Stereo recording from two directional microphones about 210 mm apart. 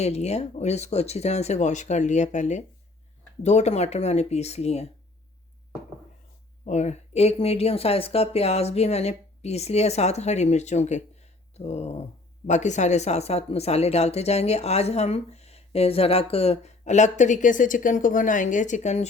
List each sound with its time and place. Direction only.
0.0 s speech: 30° left (ahead or behind)
6.7 s speech: 35° left (ahead or behind)